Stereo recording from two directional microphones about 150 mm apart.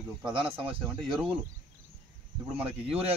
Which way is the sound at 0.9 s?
5° right (ahead or behind).